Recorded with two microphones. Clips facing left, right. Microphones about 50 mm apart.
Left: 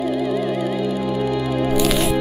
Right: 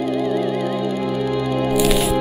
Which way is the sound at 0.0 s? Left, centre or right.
Centre.